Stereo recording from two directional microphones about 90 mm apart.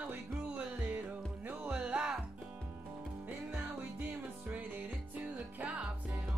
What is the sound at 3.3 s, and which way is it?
Music, 20° right (ahead or behind).